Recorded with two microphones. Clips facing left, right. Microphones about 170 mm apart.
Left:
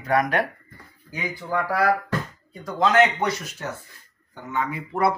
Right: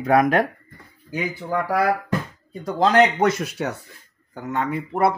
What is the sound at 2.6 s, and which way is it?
Speech, 30° right (ahead or behind).